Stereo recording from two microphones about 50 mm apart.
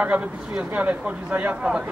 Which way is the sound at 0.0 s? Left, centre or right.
Right.